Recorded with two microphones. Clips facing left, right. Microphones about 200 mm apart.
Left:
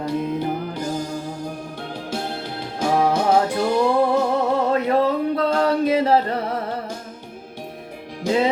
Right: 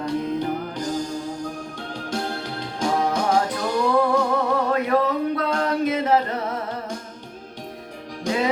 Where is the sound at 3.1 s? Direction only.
25° left (ahead or behind).